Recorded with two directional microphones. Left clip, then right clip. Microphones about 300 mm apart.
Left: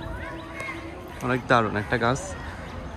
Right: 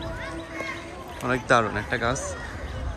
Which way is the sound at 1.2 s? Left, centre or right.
Centre.